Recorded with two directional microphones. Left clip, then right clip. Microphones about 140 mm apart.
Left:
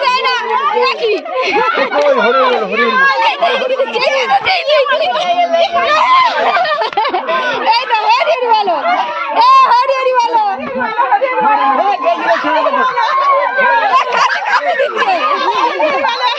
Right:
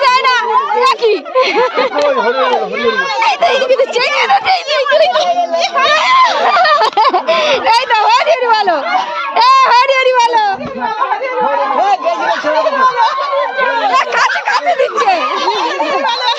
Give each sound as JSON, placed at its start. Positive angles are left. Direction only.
{"t": 0.0, "sound": "children playing", "side_deg": -55}
{"t": 0.8, "sound": "speech", "side_deg": -40}
{"t": 3.4, "sound": "fowl", "side_deg": -50}
{"t": 5.9, "sound": "speech", "side_deg": -40}
{"t": 9.4, "sound": "speech", "side_deg": -70}
{"t": 14.7, "sound": "fowl", "side_deg": -55}